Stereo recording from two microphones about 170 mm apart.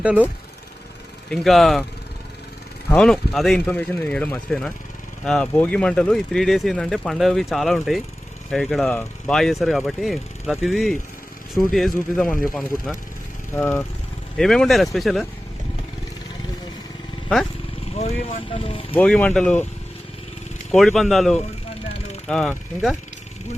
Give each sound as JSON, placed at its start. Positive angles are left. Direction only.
{"t": 0.0, "sound": "speech", "side_deg": -10}
{"t": 1.3, "sound": "speech", "side_deg": 0}
{"t": 2.9, "sound": "speech", "side_deg": 5}
{"t": 17.9, "sound": "speech", "side_deg": 35}
{"t": 18.9, "sound": "speech", "side_deg": 10}
{"t": 20.7, "sound": "speech", "side_deg": 0}